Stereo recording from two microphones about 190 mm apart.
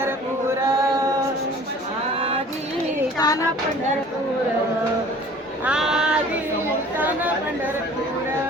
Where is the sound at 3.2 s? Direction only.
20° left (ahead or behind).